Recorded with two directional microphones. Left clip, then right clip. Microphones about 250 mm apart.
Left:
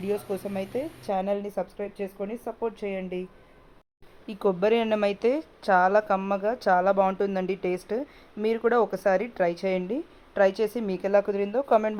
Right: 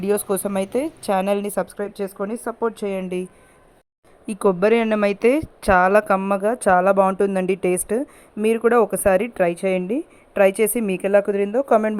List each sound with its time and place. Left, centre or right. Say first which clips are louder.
0.0 s a woman's voice: right 8 dB; right
4.3 s a woman's voice: right 6 dB; right